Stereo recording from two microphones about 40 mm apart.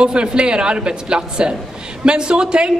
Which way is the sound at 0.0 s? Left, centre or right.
Right.